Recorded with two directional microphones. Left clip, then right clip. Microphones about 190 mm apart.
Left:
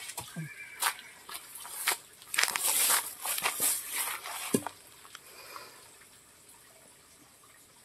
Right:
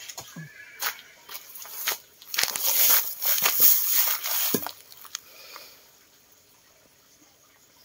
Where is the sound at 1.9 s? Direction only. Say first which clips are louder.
Right 2 dB; centre (ahead or behind).